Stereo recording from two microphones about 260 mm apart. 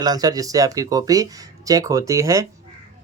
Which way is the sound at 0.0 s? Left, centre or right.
Centre.